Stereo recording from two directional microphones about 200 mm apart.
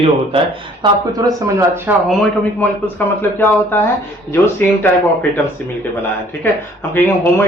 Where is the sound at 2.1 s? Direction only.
Centre (ahead or behind).